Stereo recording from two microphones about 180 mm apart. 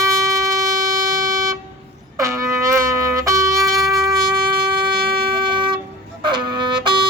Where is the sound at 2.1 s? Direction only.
15° right (ahead or behind).